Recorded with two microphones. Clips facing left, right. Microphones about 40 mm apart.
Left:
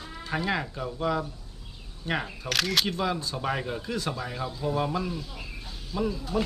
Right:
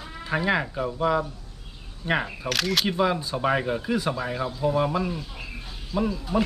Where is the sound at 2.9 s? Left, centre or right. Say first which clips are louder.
Right 5 dB; centre.